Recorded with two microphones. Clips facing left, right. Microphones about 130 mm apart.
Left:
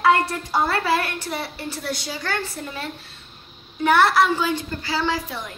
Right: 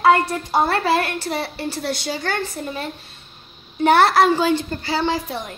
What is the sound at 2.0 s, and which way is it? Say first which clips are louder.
Speech: right 3 dB; 20° right (ahead or behind).